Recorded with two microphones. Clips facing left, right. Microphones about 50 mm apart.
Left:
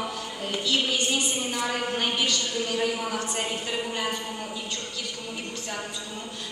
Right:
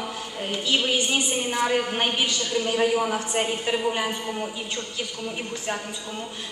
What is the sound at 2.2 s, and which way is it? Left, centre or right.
A man's voice, right.